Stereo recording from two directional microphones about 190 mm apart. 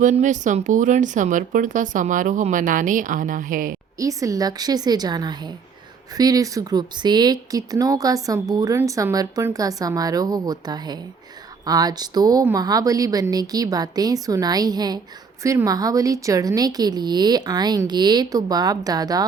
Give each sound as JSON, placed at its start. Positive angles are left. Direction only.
{"t": 0.0, "sound": "speech", "side_deg": -40}
{"t": 3.9, "sound": "speech", "side_deg": -15}